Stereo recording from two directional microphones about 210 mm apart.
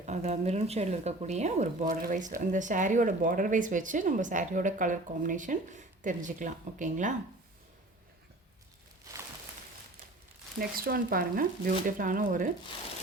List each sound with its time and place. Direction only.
0.0 s speech: 35° right (ahead or behind)
10.6 s speech: 45° right (ahead or behind)